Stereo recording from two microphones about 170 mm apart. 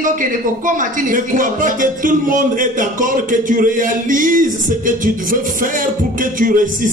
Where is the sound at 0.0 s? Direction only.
50° right (ahead or behind).